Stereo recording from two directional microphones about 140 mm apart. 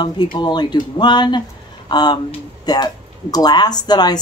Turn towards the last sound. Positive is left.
turn(degrees=30)  # may be behind; listen again after turning